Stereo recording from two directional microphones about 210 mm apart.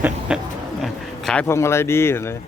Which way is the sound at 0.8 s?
5° left (ahead or behind).